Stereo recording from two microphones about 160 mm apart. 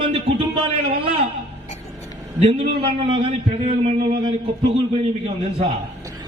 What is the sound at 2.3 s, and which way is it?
A man's voice, 40° right (ahead or behind).